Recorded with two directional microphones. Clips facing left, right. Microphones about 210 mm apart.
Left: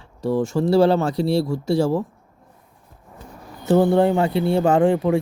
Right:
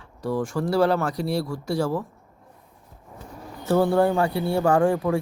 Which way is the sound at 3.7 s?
20° left (ahead or behind).